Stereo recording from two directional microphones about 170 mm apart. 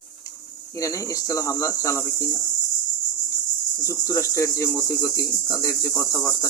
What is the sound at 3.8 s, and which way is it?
Cricket, 20° left (ahead or behind).